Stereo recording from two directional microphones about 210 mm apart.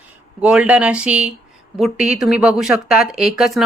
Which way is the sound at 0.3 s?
5° right (ahead or behind).